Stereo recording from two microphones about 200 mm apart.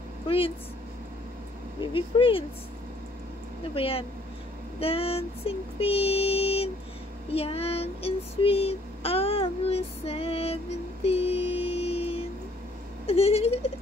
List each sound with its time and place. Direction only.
1.8 s child singing: 25° left (ahead or behind)
3.7 s child singing: 30° left (ahead or behind)
11.1 s mantra: 30° left (ahead or behind)
13.0 s speech: 30° left (ahead or behind)